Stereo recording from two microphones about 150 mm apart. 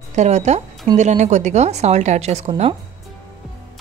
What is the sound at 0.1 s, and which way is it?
Speech, 50° right (ahead or behind).